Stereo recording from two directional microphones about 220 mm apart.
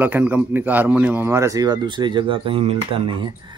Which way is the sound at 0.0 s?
10° right (ahead or behind).